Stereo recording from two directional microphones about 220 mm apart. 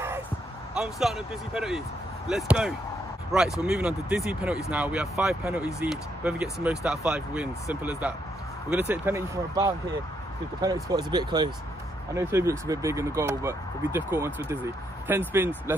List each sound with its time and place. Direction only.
0.7 s speech: centre (ahead or behind)